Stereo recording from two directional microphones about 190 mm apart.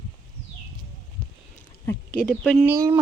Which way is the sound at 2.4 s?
5° right (ahead or behind).